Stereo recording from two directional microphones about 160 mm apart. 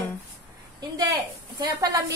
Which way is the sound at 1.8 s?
25° right (ahead or behind).